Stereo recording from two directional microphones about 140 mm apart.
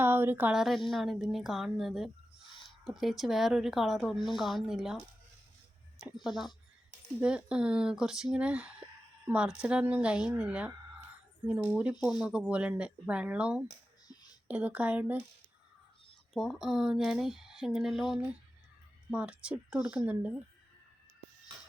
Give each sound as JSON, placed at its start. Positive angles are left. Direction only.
{"t": 0.0, "sound": "a sound", "side_deg": -15}
{"t": 0.5, "sound": "speech", "side_deg": 0}
{"t": 11.7, "sound": "speech", "side_deg": -10}
{"t": 16.3, "sound": "speech", "side_deg": 0}